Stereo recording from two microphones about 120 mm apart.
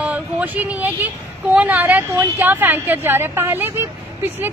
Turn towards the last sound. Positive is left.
turn(degrees=-20)  # may be behind; listen again after turning